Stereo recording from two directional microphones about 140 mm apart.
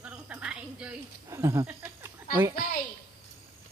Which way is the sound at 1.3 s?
20° right (ahead or behind).